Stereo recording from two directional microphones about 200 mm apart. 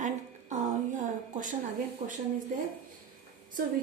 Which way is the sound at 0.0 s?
40° right (ahead or behind).